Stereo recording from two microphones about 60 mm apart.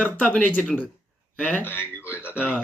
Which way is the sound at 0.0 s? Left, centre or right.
Left.